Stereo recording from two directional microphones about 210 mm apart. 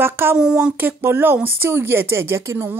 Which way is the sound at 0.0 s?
10° right (ahead or behind).